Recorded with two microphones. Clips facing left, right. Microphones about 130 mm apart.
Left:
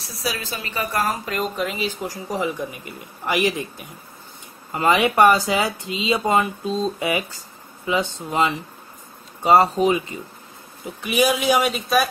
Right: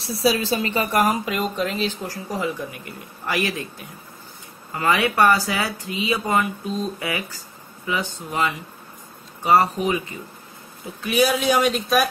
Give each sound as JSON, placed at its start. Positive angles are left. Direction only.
{"t": 0.0, "sound": "a woman's voice", "side_deg": -30}
{"t": 0.9, "sound": "speech", "side_deg": -15}
{"t": 1.3, "sound": "speech", "side_deg": 0}
{"t": 4.7, "sound": "speech", "side_deg": 20}
{"t": 11.0, "sound": "speech", "side_deg": 15}